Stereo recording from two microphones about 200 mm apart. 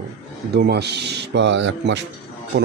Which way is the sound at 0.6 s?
55° right (ahead or behind).